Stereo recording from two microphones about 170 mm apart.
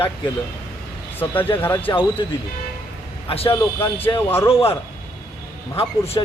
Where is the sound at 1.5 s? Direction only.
10° left (ahead or behind).